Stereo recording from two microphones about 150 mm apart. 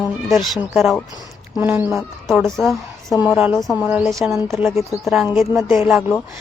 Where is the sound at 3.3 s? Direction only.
10° right (ahead or behind).